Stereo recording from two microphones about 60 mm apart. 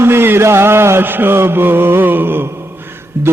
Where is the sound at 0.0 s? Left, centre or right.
Right.